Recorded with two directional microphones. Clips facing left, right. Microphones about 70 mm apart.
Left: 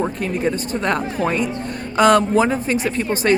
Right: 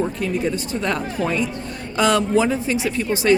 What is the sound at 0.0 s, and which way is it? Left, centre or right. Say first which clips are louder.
Speech: left 1 dB; left.